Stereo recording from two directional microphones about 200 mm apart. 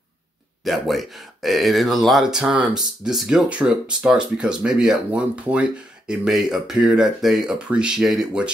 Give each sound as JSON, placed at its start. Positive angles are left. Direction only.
{"t": 0.7, "sound": "speech", "side_deg": 0}